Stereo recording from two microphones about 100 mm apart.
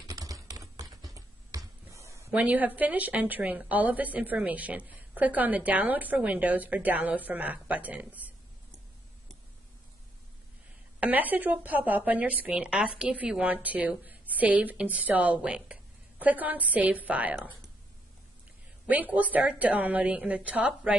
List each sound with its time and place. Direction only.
0.0 s typing: 35° right (ahead or behind)
1.1 s a sound: 35° right (ahead or behind)
2.3 s a woman's voice: 15° right (ahead or behind)
11.0 s a woman's voice: 15° right (ahead or behind)
18.9 s a woman's voice: 15° right (ahead or behind)